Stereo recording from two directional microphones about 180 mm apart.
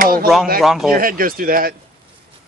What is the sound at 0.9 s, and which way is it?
Speech, 50° right (ahead or behind).